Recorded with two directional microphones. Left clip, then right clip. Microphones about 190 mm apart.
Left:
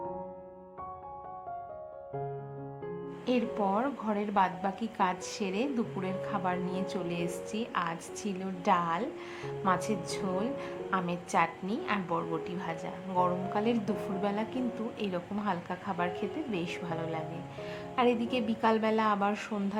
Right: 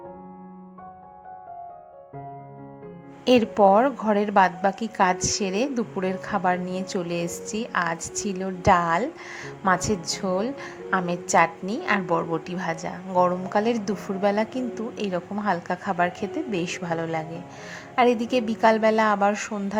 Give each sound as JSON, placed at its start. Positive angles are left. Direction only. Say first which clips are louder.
{"t": 3.2, "sound": "a woman's voice", "louder": "right 13 dB", "side_deg": -35}